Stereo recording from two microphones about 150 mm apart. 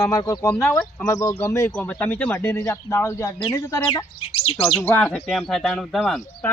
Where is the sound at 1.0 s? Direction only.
20° left (ahead or behind).